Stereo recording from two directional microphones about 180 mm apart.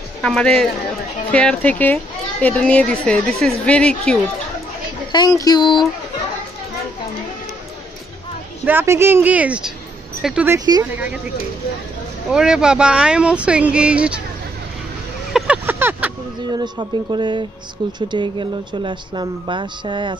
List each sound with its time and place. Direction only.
0.2 s a woman's voice: 5° left (ahead or behind)
5.1 s speech: 20° left (ahead or behind)
8.6 s a woman's voice: 10° right (ahead or behind)
10.6 s speech: 20° right (ahead or behind)
12.3 s speech: 5° right (ahead or behind)
15.3 s vehicle: 5° right (ahead or behind)
16.5 s speech: 25° right (ahead or behind)